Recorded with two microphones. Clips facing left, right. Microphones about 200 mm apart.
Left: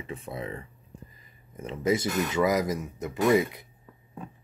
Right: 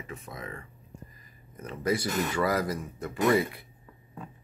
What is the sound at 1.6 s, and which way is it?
Speech, 20° left (ahead or behind).